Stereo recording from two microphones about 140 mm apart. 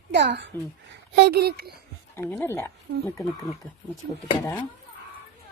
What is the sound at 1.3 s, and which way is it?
Speech, 90° right.